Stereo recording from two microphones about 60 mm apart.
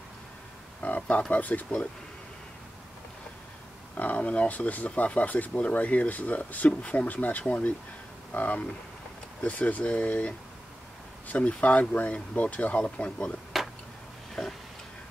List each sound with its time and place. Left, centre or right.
0.8 s speech: left
3.9 s speech: left
11.3 s speech: left
14.4 s a sound: centre